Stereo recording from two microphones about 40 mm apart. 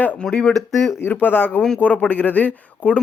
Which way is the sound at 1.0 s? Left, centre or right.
Left.